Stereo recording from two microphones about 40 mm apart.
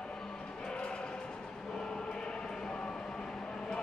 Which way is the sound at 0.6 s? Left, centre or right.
Left.